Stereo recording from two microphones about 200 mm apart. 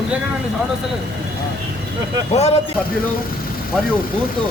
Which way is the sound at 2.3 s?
30° left (ahead or behind).